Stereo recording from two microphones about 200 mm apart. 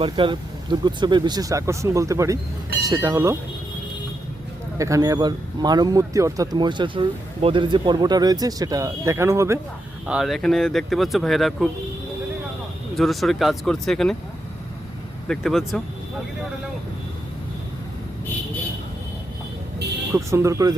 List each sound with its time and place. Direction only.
0.0 s speech: 25° right (ahead or behind)
4.8 s a man's voice: 15° right (ahead or behind)
10.1 s speech: centre (ahead or behind)
13.0 s speech: centre (ahead or behind)
15.3 s speech: centre (ahead or behind)
20.1 s speech: 15° right (ahead or behind)